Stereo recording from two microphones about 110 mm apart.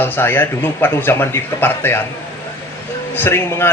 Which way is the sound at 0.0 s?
20° left (ahead or behind).